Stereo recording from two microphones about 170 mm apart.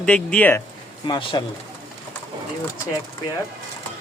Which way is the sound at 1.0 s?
25° left (ahead or behind).